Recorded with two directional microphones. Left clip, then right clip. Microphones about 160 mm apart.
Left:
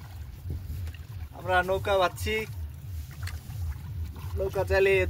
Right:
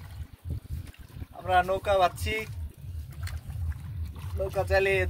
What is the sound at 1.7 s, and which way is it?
Speech, 20° right (ahead or behind).